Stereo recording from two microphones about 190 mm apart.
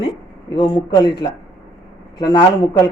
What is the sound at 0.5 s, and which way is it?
A man's voice, 25° left (ahead or behind).